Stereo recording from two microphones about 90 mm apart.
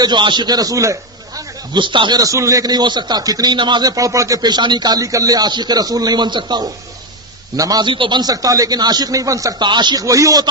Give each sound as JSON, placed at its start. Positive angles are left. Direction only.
{"t": 0.0, "sound": "speech", "side_deg": -60}
{"t": 1.7, "sound": "speech", "side_deg": -65}
{"t": 2.1, "sound": "speech", "side_deg": -40}
{"t": 3.8, "sound": "speech", "side_deg": -40}
{"t": 7.5, "sound": "a man's voice", "side_deg": -40}
{"t": 7.8, "sound": "speech", "side_deg": -65}
{"t": 8.2, "sound": "a man's voice", "side_deg": -40}
{"t": 9.6, "sound": "speech", "side_deg": -55}
{"t": 10.0, "sound": "a man's voice", "side_deg": -40}